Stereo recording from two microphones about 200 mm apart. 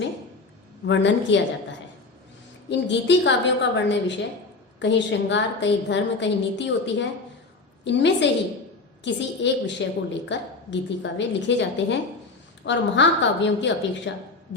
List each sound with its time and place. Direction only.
0.9 s a woman's voice: 65° left (ahead or behind)
2.6 s a woman's voice: 60° left (ahead or behind)